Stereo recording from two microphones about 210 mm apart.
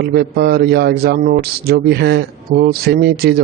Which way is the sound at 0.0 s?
50° right (ahead or behind).